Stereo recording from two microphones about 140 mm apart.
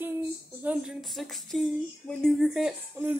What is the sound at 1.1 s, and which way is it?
Speech, centre (ahead or behind).